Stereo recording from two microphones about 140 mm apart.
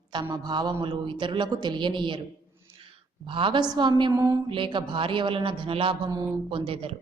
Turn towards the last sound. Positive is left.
turn(degrees=-40)  # may be behind; listen again after turning